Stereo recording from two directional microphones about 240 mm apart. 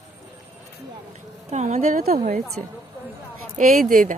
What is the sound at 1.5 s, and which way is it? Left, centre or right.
Speech, right.